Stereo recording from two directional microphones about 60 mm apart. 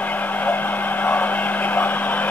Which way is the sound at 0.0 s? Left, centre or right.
Left.